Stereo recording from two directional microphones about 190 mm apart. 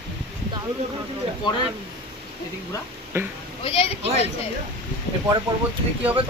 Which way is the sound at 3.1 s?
10° right (ahead or behind).